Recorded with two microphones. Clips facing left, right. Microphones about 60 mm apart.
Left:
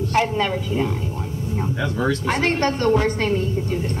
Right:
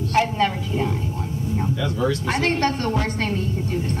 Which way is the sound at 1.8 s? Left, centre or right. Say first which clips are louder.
Left 2 dB; left.